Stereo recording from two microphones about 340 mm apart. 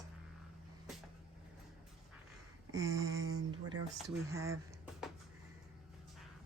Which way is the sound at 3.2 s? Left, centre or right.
Right.